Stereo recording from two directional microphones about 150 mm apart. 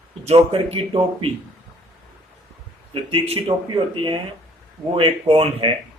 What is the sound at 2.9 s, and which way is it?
Speech, 40° right (ahead or behind).